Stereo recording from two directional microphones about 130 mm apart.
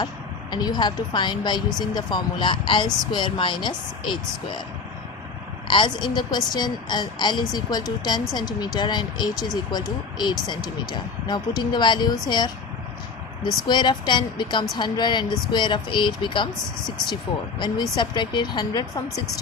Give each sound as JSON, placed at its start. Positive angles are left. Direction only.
{"t": 0.5, "sound": "a woman's voice", "side_deg": 35}
{"t": 5.6, "sound": "a woman's voice", "side_deg": 40}
{"t": 17.6, "sound": "a woman's voice", "side_deg": 35}